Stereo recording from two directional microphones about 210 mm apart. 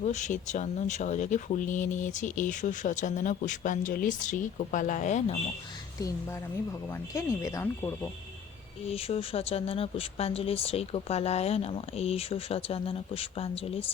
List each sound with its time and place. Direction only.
0.0 s speech: 35° left (ahead or behind)
7.1 s speech: 15° left (ahead or behind)
8.9 s speech: 30° left (ahead or behind)